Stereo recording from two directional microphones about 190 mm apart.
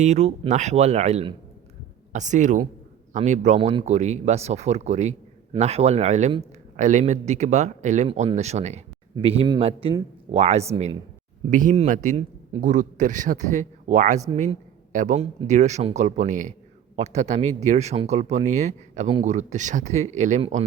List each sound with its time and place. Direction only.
0.0 s speech: 35° right (ahead or behind)